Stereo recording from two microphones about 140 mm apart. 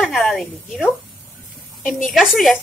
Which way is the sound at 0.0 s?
Centre (ahead or behind).